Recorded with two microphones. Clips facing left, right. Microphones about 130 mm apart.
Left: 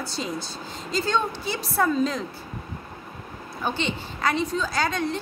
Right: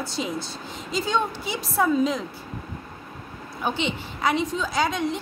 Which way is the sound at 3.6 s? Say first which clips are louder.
Right 1 dB; 15° right (ahead or behind).